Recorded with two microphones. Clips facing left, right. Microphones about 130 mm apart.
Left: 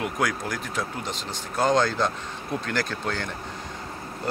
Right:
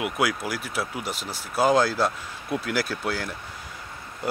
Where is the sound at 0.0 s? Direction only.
5° right (ahead or behind).